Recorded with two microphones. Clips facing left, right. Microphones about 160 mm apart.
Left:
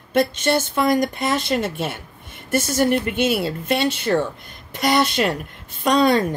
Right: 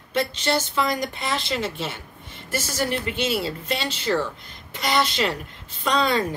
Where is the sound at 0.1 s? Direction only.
55° left (ahead or behind).